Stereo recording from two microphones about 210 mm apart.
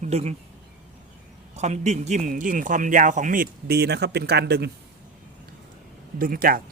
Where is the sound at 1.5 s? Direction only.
30° right (ahead or behind); by 4.7 s 50° right (ahead or behind).